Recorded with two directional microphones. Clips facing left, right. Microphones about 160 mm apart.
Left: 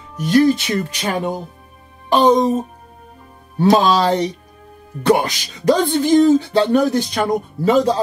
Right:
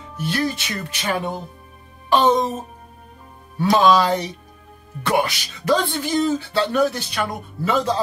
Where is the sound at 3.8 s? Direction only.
35° left (ahead or behind).